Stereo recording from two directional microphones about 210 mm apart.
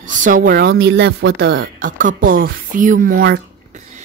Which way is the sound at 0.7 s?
60° right (ahead or behind).